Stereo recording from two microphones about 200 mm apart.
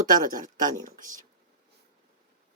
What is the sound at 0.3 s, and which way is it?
Speech, 40° right (ahead or behind).